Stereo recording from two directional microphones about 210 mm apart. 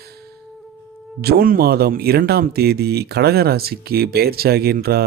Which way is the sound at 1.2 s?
45° right (ahead or behind).